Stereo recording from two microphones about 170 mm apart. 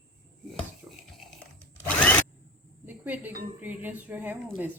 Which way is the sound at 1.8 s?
10° left (ahead or behind).